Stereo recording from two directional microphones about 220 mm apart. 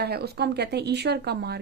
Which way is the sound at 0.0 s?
45° right (ahead or behind).